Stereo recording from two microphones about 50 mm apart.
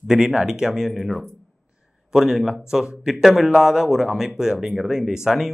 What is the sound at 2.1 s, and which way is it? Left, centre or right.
A man's voice, centre.